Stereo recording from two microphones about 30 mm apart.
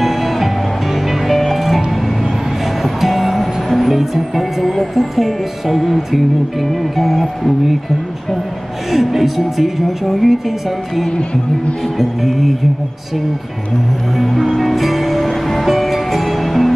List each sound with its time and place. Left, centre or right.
0.0 s music: centre
2.8 s music: centre
7.0 s speech: centre
8.9 s speech: centre
12.0 s speech: centre
14.1 s music: centre